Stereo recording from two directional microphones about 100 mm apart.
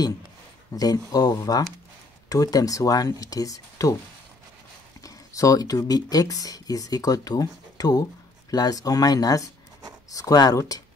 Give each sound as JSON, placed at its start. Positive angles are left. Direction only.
{"t": 0.7, "sound": "speech", "side_deg": 40}
{"t": 5.0, "sound": "speech", "side_deg": 35}